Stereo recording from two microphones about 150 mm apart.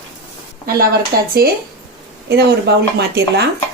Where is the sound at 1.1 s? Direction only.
75° right (ahead or behind).